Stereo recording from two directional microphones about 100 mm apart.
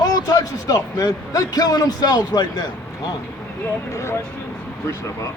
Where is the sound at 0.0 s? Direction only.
40° left (ahead or behind).